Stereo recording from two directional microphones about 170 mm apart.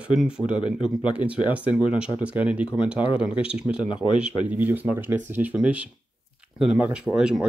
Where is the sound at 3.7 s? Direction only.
30° left (ahead or behind).